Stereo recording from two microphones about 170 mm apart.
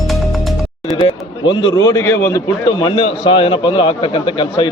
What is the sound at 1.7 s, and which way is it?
A man's voice, 15° left (ahead or behind).